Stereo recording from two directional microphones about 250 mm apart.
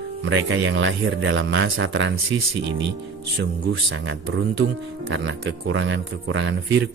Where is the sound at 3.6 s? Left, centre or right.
Right.